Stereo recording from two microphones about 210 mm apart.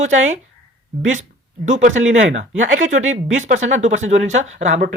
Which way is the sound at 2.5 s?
70° right (ahead or behind).